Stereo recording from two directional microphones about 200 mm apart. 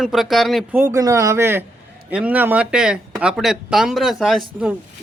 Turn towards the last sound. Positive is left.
turn(degrees=0)  # may be behind; listen again after turning